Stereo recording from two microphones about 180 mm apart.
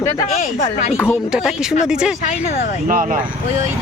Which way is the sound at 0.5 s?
40° left (ahead or behind).